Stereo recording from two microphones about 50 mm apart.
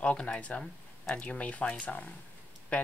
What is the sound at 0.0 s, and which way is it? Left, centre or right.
Speech, left.